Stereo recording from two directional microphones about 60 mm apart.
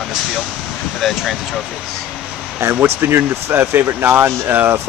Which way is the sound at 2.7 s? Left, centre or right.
Right.